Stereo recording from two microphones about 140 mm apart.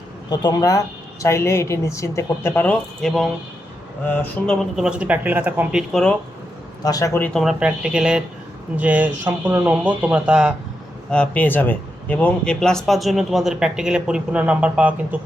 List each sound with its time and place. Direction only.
0.3 s a woman's voice: 30° left (ahead or behind)
3.0 s speech: centre (ahead or behind)
4.0 s speech: 10° left (ahead or behind)
4.9 s speech: 10° right (ahead or behind)
5.9 s speech: 5° left (ahead or behind)
6.8 s a woman's voice: 25° left (ahead or behind)
7.3 s speech: 5° right (ahead or behind)
11.1 s speech: 10° left (ahead or behind); by 15.2 s 10° right (ahead or behind)